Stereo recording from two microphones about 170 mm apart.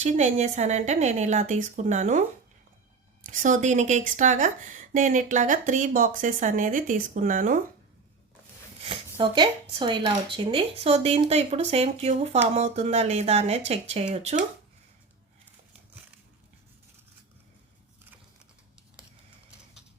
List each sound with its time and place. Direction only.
0.0 s speech: 45° right (ahead or behind)
3.2 s speech: 50° right (ahead or behind)
8.8 s speech: 30° right (ahead or behind)